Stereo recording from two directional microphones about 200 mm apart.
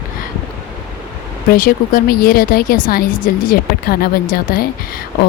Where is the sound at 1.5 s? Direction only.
45° left (ahead or behind).